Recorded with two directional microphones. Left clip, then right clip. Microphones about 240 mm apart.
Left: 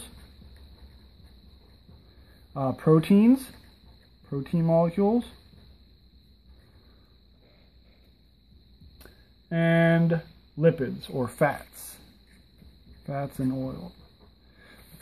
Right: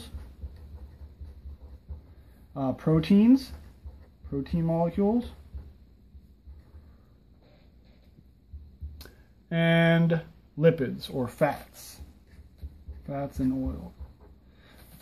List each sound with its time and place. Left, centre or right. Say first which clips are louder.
2.5 s speech: left 5 dB; left
8.9 s speech: right 2 dB; centre
11.2 s speech: left 2 dB; left
13.0 s speech: left 1 dB; left